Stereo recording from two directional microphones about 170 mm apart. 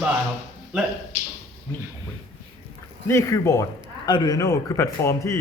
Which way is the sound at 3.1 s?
15° left (ahead or behind).